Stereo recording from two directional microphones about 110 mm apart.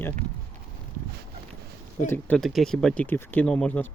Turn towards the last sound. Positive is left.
turn(degrees=10)  # may be behind; listen again after turning